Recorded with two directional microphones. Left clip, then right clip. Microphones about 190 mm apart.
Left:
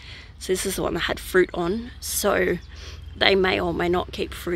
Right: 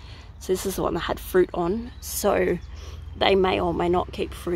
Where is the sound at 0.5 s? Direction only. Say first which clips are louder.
Even; centre (ahead or behind).